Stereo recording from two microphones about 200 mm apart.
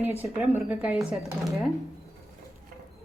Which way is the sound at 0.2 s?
10° right (ahead or behind).